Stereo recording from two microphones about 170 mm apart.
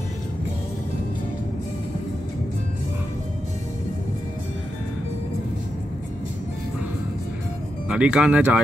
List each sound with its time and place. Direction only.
7.9 s speech: 5° right (ahead or behind)